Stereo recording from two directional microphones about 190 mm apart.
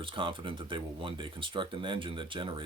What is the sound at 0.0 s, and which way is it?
Speech, 25° right (ahead or behind).